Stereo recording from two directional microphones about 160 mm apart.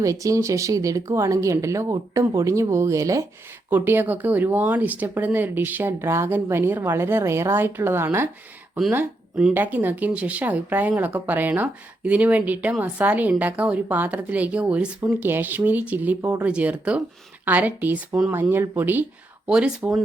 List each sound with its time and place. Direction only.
0.0 s speech: 20° right (ahead or behind); by 20.0 s 5° right (ahead or behind)